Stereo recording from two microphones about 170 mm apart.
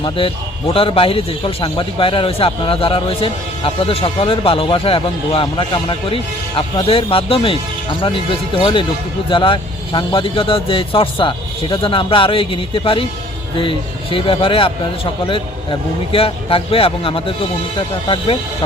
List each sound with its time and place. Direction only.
0.0 s speech: 30° left (ahead or behind)